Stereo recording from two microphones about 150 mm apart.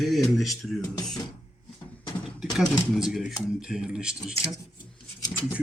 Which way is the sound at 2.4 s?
Centre (ahead or behind).